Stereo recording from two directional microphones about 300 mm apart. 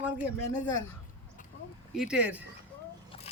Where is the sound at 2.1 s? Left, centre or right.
Centre.